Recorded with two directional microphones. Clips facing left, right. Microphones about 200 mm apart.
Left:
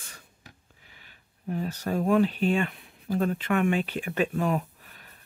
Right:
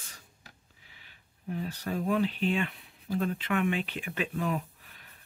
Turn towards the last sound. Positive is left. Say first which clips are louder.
# left 5 dB
turn(degrees=45)  # may be behind; listen again after turning